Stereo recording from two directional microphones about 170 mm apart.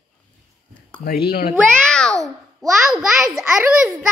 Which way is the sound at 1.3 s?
60° left (ahead or behind).